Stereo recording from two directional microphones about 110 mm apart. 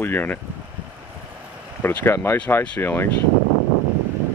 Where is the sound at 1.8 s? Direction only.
20° left (ahead or behind).